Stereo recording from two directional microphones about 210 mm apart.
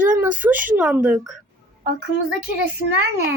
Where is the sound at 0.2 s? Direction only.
10° right (ahead or behind).